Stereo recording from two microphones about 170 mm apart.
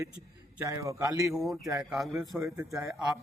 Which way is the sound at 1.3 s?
Centre (ahead or behind).